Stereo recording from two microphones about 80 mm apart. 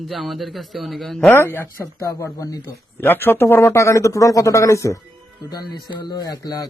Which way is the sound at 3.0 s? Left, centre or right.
Left.